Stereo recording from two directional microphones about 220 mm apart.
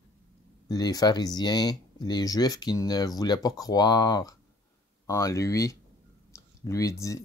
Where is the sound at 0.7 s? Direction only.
15° left (ahead or behind).